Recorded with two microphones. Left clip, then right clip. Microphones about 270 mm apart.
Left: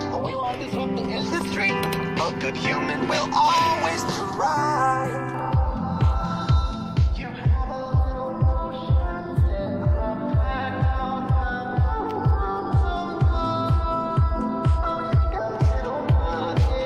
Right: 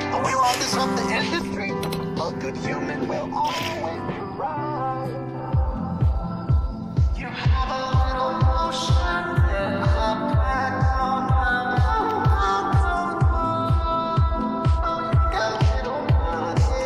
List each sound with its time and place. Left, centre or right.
0.2 s music: right
1.3 s music: centre
3.1 s music: left
4.4 s music: left
9.6 s music: right
13.4 s music: centre